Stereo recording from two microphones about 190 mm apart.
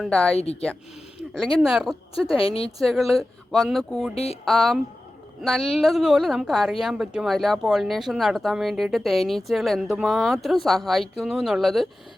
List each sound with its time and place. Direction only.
0.0 s a woman's voice: 5° left (ahead or behind)
2.4 s a woman's voice: 30° left (ahead or behind)
2.7 s a woman's voice: centre (ahead or behind)
4.1 s speech: 30° left (ahead or behind)
4.4 s a woman's voice: centre (ahead or behind)